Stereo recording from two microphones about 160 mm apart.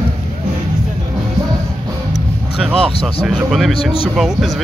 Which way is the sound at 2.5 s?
Centre (ahead or behind).